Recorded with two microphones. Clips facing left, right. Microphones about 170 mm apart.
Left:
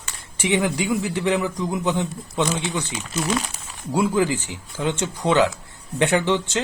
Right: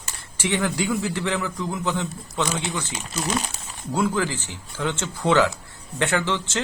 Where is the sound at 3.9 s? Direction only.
15° left (ahead or behind).